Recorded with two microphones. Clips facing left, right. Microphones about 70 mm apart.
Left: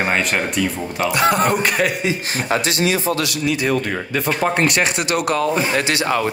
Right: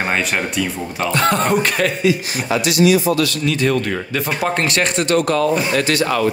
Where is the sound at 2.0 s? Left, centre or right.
Left.